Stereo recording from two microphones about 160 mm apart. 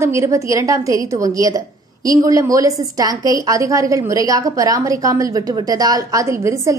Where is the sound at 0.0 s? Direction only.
15° right (ahead or behind).